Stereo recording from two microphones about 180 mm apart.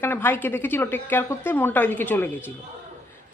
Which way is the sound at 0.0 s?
10° left (ahead or behind).